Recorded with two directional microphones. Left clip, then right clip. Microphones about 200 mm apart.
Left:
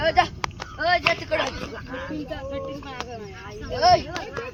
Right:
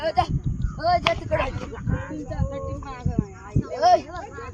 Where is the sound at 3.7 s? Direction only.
Centre (ahead or behind).